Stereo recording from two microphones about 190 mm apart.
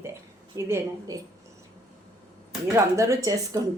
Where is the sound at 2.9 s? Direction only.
15° right (ahead or behind).